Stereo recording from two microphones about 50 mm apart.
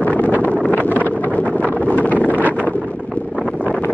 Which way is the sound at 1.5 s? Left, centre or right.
Right.